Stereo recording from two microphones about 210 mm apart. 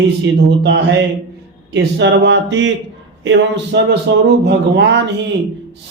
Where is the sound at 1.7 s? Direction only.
60° right (ahead or behind).